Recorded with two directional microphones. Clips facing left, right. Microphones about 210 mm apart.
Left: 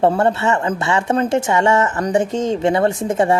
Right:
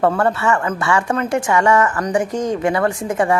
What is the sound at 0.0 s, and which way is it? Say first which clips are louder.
Speech: left 1 dB; 25° left (ahead or behind).